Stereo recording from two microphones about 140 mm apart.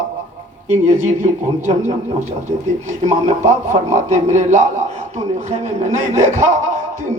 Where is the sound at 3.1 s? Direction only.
55° right (ahead or behind).